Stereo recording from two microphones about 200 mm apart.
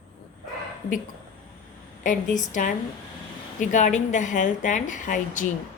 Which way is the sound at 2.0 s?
40° left (ahead or behind).